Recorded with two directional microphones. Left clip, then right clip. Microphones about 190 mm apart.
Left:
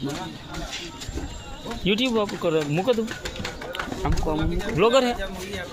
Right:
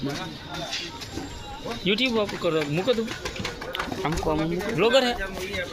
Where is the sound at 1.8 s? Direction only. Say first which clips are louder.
Left 1 dB; 50° left (ahead or behind).